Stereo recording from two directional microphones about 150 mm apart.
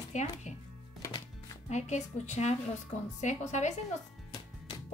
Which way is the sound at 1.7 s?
50° left (ahead or behind).